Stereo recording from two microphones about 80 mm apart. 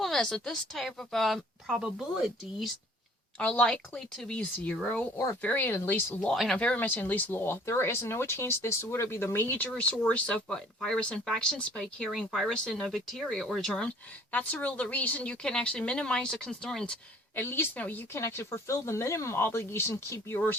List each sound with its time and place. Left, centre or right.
0.0 s a woman's voice: centre
1.7 s speech: centre
3.3 s speech: centre
5.1 s speech: left
5.4 s speech: centre
6.5 s speech: centre
6.7 s speech: left; by 13.9 s centre
14.3 s speech: centre
17.4 s speech: left
17.7 s speech: centre
18.1 s speech: left